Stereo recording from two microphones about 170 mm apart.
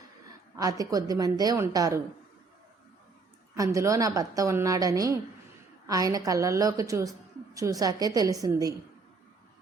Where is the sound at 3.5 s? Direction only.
20° right (ahead or behind).